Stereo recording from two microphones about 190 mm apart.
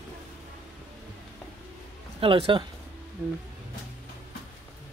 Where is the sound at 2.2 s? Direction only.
30° right (ahead or behind).